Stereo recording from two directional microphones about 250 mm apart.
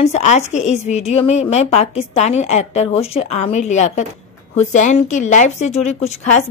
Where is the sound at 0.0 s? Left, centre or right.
Left.